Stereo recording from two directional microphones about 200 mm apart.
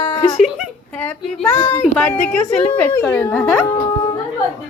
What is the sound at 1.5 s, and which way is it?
Speech, 20° left (ahead or behind).